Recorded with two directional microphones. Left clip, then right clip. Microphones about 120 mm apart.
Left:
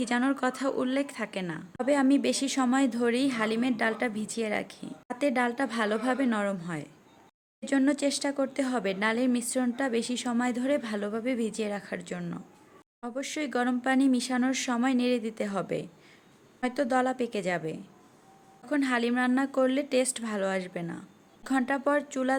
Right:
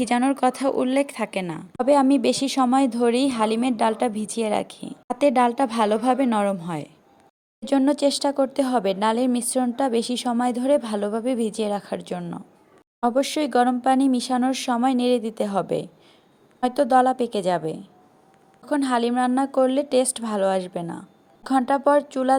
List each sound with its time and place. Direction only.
0.0 s a woman's voice: 35° right (ahead or behind)
7.6 s speech: 30° right (ahead or behind)
13.0 s speech: 20° right (ahead or behind)